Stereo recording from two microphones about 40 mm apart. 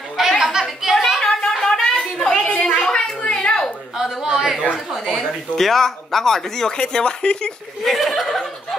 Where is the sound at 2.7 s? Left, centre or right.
Left.